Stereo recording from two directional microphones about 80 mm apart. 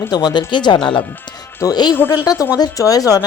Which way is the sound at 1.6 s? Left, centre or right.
Left.